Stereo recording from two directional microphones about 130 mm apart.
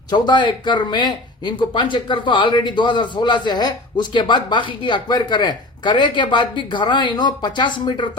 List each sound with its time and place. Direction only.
0.1 s speech: 35° left (ahead or behind)